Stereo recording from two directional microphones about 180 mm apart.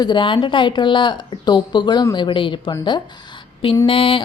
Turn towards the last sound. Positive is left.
turn(degrees=30)  # may be behind; listen again after turning